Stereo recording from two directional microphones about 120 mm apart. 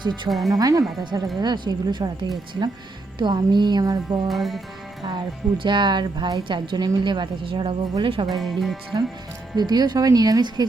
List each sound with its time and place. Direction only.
0.1 s speech: centre (ahead or behind)
0.5 s a woman's voice: 30° right (ahead or behind)
4.3 s speech: centre (ahead or behind)
5.0 s a woman's voice: 40° right (ahead or behind)
8.3 s speech: centre (ahead or behind)
9.6 s a woman's voice: 35° right (ahead or behind)